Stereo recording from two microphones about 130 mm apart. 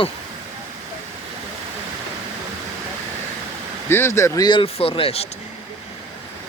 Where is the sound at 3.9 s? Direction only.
20° left (ahead or behind).